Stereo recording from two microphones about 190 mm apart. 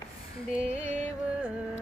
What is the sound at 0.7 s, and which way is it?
Music, 40° right (ahead or behind).